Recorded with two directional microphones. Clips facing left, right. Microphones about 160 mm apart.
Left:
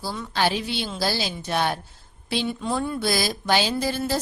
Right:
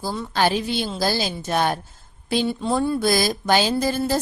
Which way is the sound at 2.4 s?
30° right (ahead or behind).